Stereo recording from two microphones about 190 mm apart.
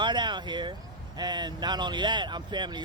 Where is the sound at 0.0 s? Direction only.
25° right (ahead or behind).